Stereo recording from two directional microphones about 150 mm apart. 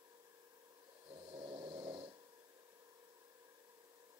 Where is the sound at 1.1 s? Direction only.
35° right (ahead or behind).